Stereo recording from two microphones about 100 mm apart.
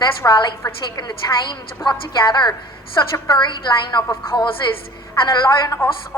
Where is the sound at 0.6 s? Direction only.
45° left (ahead or behind).